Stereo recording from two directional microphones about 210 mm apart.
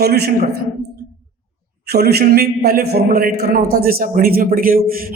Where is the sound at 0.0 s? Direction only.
50° right (ahead or behind).